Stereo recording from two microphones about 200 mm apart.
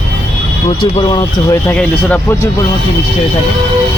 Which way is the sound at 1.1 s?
20° left (ahead or behind).